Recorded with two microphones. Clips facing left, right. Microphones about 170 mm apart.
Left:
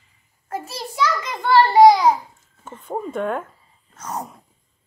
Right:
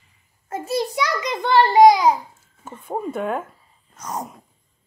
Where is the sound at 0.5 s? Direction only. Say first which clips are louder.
Right 7 dB; 20° right (ahead or behind).